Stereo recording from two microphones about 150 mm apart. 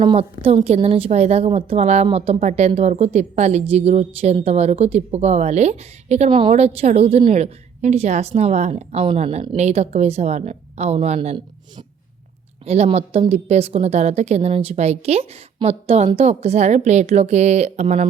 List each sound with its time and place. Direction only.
0.0 s a woman's voice: 35° right (ahead or behind)
12.6 s a woman's voice: 45° right (ahead or behind)